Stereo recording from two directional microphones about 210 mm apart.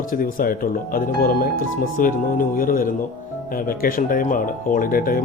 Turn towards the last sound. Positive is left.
turn(degrees=45)  # may be behind; listen again after turning